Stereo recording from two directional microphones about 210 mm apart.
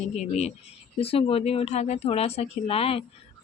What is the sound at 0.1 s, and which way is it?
Speech, 30° left (ahead or behind).